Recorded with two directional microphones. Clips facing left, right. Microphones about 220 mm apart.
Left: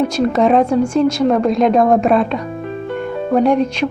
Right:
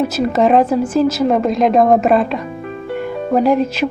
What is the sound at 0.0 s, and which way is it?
Speech, 5° right (ahead or behind).